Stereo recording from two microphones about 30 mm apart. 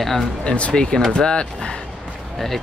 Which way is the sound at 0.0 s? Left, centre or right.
Centre.